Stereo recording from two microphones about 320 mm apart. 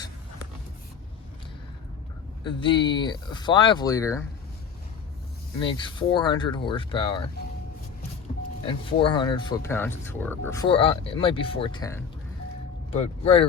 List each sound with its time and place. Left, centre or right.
2.4 s speech: centre
5.5 s speech: centre
8.6 s speech: centre